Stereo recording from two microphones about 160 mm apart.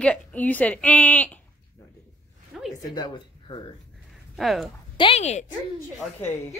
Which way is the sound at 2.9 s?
30° left (ahead or behind).